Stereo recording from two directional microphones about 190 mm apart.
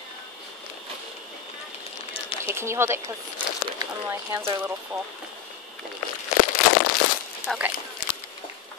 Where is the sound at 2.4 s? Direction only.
15° right (ahead or behind).